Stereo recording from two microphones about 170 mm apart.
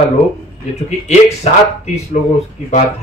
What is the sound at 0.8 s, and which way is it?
Speech, 40° left (ahead or behind).